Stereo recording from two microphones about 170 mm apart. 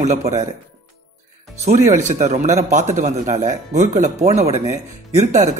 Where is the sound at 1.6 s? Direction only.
45° right (ahead or behind).